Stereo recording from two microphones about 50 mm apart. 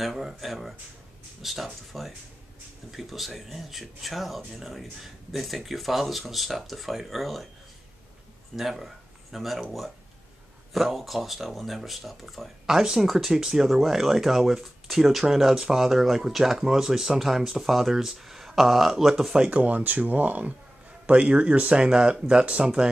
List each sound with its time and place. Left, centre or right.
0.0 s speech: centre
8.5 s speech: centre
19.4 s speech: right